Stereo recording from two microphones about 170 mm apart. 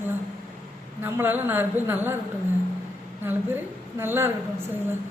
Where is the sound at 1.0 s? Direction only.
10° right (ahead or behind).